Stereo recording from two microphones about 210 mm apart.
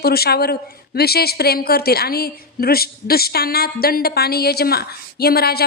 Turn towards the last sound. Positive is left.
turn(degrees=50)  # may be behind; listen again after turning